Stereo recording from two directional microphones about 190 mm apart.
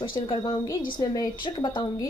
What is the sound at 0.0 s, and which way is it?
A woman's voice, 25° left (ahead or behind).